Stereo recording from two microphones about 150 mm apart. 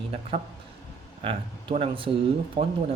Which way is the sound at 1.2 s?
35° right (ahead or behind).